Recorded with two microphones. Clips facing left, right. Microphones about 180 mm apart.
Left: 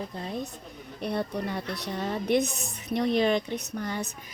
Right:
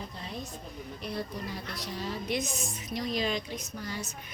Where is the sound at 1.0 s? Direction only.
60° left (ahead or behind).